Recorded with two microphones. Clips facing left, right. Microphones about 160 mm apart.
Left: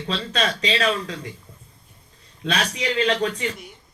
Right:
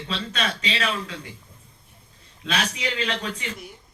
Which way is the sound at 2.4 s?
35° left (ahead or behind).